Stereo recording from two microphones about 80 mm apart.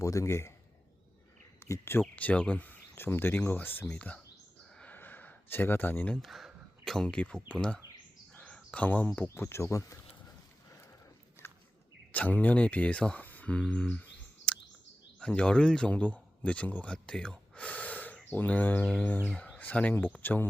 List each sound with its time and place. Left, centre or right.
0.0 s speech: left
1.5 s speech: left
2.1 s speech: centre
4.9 s a sound: left
6.2 s speech: centre
8.4 s cricket: centre
9.1 s speech: left
12.1 s speech: centre